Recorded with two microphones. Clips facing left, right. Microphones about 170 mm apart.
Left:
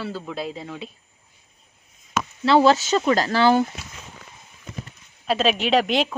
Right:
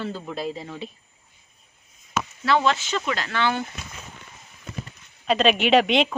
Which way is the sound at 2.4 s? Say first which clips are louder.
Left 6 dB; 30° left (ahead or behind).